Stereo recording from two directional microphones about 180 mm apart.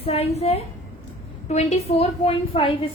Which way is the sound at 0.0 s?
35° left (ahead or behind).